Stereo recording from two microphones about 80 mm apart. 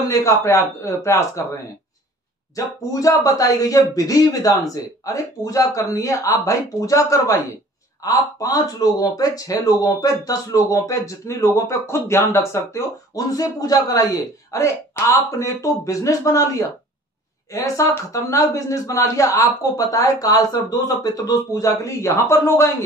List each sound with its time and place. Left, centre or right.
0.1 s a man's voice: left
2.5 s speech: left